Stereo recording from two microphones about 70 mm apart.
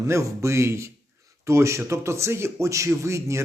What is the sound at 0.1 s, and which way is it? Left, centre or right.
A man's voice, right.